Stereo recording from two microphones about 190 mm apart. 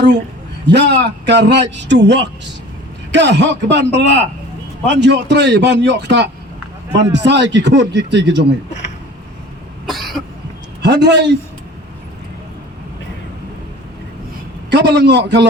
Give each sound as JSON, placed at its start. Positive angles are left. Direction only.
{"t": 0.7, "sound": "a man's voice", "side_deg": -65}
{"t": 9.8, "sound": "cough", "side_deg": 0}
{"t": 10.8, "sound": "a man's voice", "side_deg": -65}
{"t": 14.7, "sound": "a man's voice", "side_deg": -65}